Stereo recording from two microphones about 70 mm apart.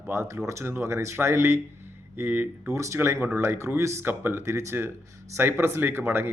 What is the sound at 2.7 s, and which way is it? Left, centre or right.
Speech, right.